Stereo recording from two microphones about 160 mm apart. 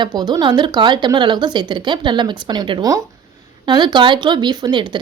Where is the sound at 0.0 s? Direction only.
25° right (ahead or behind).